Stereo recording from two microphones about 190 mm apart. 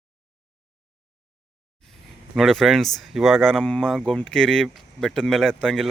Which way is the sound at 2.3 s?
Centre (ahead or behind).